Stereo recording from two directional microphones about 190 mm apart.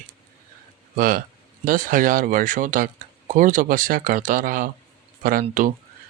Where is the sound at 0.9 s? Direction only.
45° right (ahead or behind).